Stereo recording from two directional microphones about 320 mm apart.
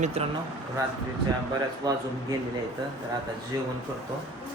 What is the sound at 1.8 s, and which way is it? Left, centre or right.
Speech, centre.